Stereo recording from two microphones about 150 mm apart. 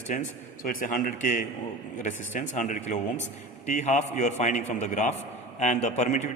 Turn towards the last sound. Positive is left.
turn(degrees=50)  # may be behind; listen again after turning